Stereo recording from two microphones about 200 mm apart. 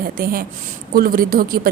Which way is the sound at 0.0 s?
45° right (ahead or behind).